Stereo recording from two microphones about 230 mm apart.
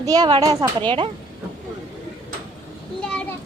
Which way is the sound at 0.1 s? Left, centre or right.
Centre.